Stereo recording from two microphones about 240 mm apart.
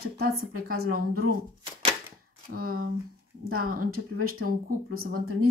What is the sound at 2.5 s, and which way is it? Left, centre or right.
Speech, right.